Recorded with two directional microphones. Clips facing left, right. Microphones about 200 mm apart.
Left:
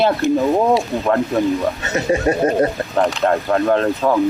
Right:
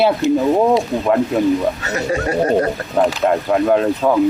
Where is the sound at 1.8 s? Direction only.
20° left (ahead or behind).